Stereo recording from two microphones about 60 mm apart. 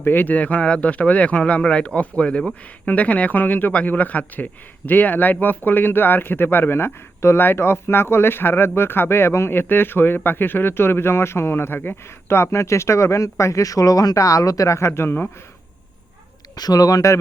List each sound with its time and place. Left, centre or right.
0.0 s speech: left
12.4 s speech: left
14.8 s speech: left
16.6 s speech: left